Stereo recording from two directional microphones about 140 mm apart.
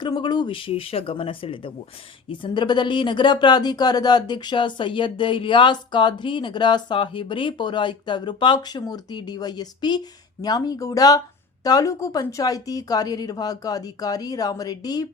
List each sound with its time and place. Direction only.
0.0 s a woman's voice: 30° left (ahead or behind)